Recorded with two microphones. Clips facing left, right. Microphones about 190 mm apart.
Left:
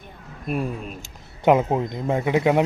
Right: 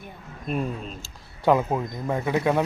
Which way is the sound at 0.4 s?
10° left (ahead or behind).